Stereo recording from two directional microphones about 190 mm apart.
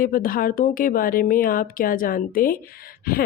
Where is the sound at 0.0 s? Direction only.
50° left (ahead or behind).